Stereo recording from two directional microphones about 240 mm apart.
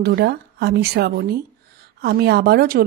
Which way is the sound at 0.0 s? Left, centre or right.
Right.